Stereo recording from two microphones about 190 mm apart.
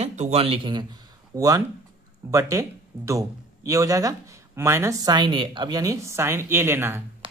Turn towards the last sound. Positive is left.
turn(degrees=-15)  # may be behind; listen again after turning